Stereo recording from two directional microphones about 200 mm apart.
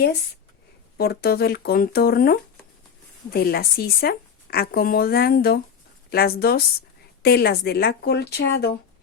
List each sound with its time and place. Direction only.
0.9 s speech: 50° left (ahead or behind)